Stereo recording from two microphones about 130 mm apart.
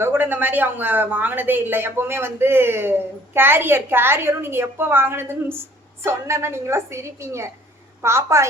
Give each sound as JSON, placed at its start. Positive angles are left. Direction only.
{"t": 0.0, "sound": "a woman's voice", "side_deg": -15}